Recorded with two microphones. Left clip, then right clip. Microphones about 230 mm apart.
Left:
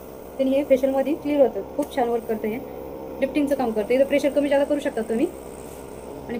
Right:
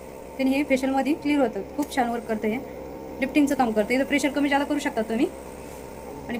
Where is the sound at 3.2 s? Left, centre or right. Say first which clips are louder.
Even; right.